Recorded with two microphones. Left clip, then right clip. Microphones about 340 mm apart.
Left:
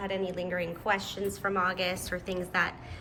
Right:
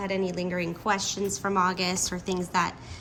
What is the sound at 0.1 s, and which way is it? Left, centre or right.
A woman's voice, centre.